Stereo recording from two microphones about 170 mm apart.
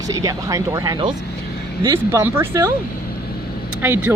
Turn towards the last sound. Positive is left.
turn(degrees=-10)  # may be behind; listen again after turning